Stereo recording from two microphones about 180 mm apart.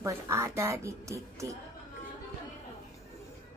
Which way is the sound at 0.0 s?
15° right (ahead or behind).